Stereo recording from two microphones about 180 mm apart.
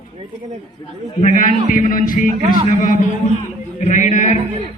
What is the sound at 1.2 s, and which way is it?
Speech, 45° left (ahead or behind).